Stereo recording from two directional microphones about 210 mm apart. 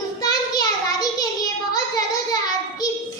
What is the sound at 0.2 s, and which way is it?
Child singing, 20° left (ahead or behind).